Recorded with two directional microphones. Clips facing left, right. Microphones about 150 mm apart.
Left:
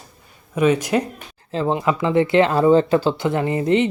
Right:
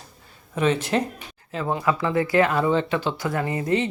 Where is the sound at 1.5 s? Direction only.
25° left (ahead or behind).